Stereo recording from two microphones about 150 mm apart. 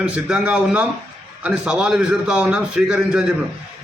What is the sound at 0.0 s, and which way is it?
A man's voice, 5° right (ahead or behind).